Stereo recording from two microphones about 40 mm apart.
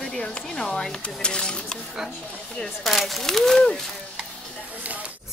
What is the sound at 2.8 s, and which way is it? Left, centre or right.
Speech, centre.